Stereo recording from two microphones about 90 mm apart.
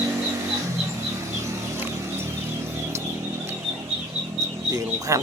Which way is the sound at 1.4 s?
30° right (ahead or behind).